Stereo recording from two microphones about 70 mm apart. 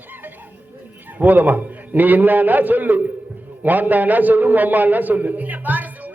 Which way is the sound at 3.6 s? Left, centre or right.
Right.